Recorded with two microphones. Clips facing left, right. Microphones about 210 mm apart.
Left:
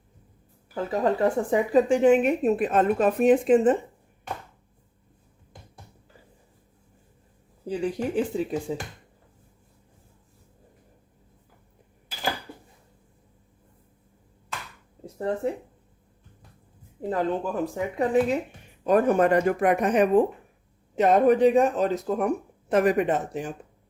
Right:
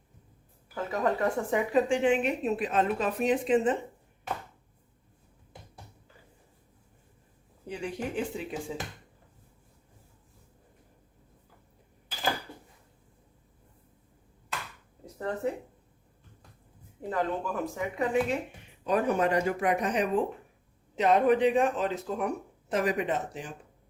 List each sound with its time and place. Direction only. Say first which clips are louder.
0.7 s a woman's voice: left 4 dB; 30° left (ahead or behind); by 3.8 s 45° left (ahead or behind)
7.7 s speech: left 7 dB; 35° left (ahead or behind)
15.0 s a sound: left 6 dB; 30° left (ahead or behind)
17.1 s speech: left 4 dB; 35° left (ahead or behind)
18.9 s a woman's voice: left 6 dB; 50° left (ahead or behind)
22.7 s a woman's voice: left 7 dB; 55° left (ahead or behind)